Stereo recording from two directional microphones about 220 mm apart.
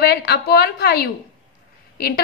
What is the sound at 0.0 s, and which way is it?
A woman's voice, 45° left (ahead or behind).